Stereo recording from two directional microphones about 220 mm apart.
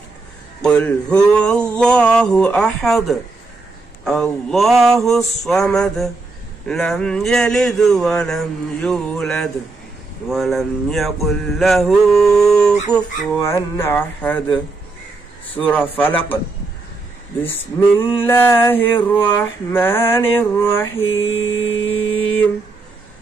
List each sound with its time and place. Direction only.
0.6 s speech: 5° left (ahead or behind)
18.2 s speech: 10° left (ahead or behind)
21.2 s mantra: 60° left (ahead or behind)
21.9 s mantra: 25° left (ahead or behind)